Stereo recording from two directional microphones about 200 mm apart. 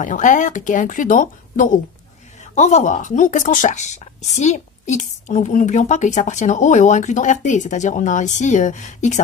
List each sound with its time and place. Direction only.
0.0 s speech: 40° left (ahead or behind)